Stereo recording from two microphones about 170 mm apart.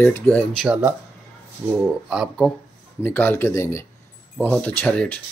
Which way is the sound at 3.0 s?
10° left (ahead or behind).